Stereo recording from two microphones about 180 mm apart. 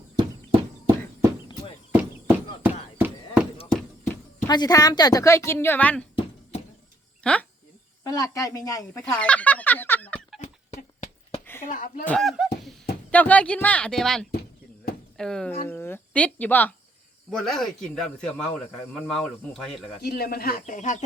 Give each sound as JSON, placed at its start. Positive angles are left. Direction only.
{"t": 1.9, "sound": "a sound", "side_deg": -10}
{"t": 4.0, "sound": "speech", "side_deg": 15}
{"t": 7.2, "sound": "speech", "side_deg": 5}
{"t": 8.0, "sound": "speech", "side_deg": 20}
{"t": 9.0, "sound": "speech", "side_deg": 5}
{"t": 10.4, "sound": "horse", "side_deg": 40}
{"t": 11.6, "sound": "speech", "side_deg": 45}
{"t": 12.0, "sound": "speech", "side_deg": 0}
{"t": 20.0, "sound": "speech", "side_deg": 60}